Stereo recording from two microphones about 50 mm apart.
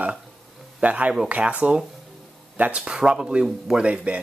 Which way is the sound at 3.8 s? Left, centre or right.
Right.